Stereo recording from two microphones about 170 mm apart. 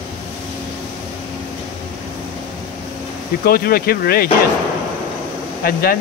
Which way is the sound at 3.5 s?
60° left (ahead or behind).